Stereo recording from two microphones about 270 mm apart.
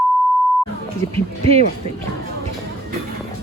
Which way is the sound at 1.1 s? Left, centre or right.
Right.